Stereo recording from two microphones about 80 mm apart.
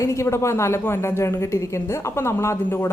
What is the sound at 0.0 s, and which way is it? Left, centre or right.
Speech, left.